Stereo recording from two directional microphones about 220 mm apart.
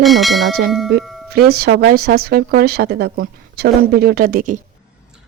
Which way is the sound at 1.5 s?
45° right (ahead or behind).